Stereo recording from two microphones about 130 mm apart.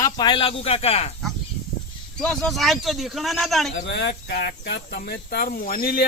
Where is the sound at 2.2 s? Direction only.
5° left (ahead or behind).